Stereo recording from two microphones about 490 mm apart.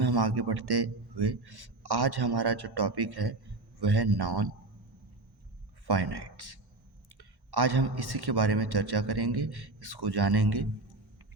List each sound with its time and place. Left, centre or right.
0.0 s a man's voice: right
5.8 s a man's voice: right